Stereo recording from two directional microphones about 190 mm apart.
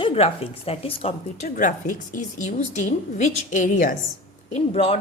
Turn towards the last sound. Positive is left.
turn(degrees=30)  # may be behind; listen again after turning